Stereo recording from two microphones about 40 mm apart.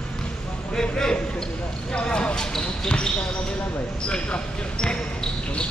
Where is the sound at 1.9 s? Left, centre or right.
Left.